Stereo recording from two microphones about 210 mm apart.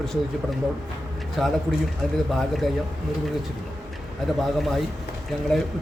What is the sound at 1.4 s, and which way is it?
Speech, centre (ahead or behind).